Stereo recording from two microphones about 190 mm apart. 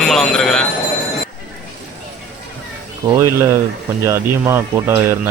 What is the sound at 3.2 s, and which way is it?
Speech, 15° right (ahead or behind).